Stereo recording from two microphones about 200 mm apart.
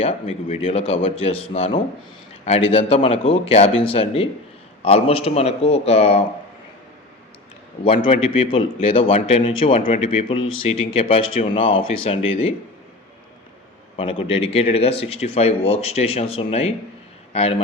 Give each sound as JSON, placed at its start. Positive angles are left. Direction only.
{"t": 0.0, "sound": "speech", "side_deg": 30}
{"t": 7.9, "sound": "speech", "side_deg": 30}
{"t": 13.9, "sound": "speech", "side_deg": 25}